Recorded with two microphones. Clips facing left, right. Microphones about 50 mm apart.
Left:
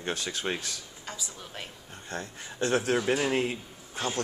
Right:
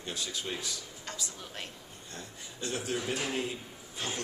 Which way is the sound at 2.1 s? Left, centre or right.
Left.